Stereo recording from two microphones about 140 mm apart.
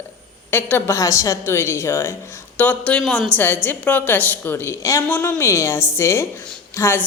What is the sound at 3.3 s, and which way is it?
Speech, 15° left (ahead or behind).